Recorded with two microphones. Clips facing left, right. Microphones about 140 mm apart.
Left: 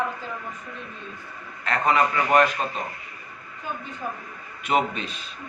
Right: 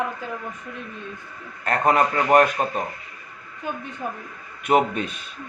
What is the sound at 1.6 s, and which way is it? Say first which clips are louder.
Speech: right 2 dB; 45° right (ahead or behind).